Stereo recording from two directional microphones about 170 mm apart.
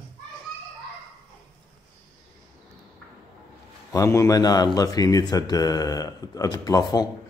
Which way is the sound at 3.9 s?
15° left (ahead or behind).